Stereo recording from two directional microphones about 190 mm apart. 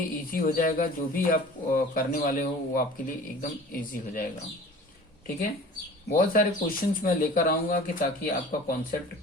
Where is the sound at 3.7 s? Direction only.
50° left (ahead or behind).